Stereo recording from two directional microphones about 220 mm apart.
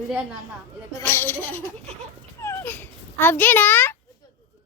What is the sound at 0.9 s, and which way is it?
A child's voice, 10° left (ahead or behind).